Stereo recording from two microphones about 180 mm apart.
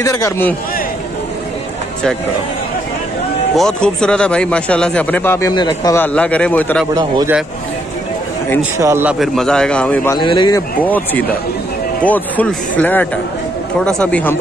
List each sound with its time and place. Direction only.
0.0 s speech: 15° left (ahead or behind)
3.5 s speech: 5° left (ahead or behind)
5.5 s speech: 25° left (ahead or behind)
5.9 s speech: 5° left (ahead or behind)
8.7 s a man's voice: 15° right (ahead or behind)
9.2 s speech: centre (ahead or behind)
10.1 s speech: 25° left (ahead or behind)
10.8 s speech: 10° left (ahead or behind)